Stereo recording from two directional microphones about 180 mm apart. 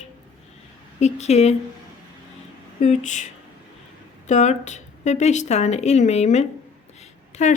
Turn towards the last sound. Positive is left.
turn(degrees=40)  # may be behind; listen again after turning